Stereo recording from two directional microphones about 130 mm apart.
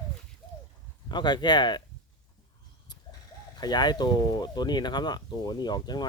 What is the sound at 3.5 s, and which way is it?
Speech, 35° left (ahead or behind).